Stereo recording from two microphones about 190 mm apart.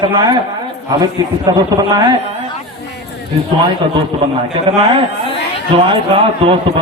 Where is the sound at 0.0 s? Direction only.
25° right (ahead or behind).